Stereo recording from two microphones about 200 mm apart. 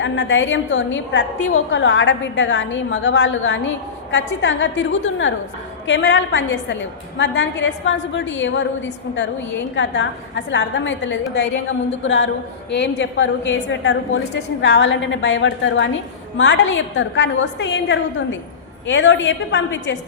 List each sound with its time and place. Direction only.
0.0 s a woman's voice: 65° left (ahead or behind)